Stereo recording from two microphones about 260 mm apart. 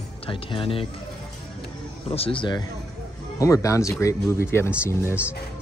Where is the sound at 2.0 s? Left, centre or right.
Left.